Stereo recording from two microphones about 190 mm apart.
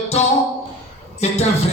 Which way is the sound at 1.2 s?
35° left (ahead or behind).